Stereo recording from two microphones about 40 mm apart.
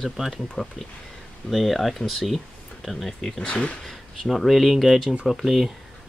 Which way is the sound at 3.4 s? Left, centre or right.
Left.